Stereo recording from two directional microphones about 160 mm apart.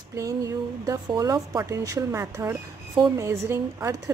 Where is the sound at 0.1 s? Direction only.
20° right (ahead or behind).